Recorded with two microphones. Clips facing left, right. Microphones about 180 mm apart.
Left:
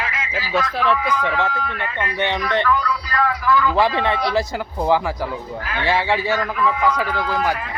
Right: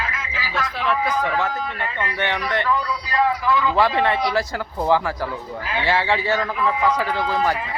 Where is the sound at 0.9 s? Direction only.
40° right (ahead or behind).